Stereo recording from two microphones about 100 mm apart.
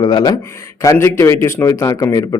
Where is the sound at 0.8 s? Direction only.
25° left (ahead or behind).